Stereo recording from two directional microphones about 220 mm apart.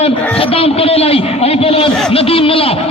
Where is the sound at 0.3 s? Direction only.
25° left (ahead or behind).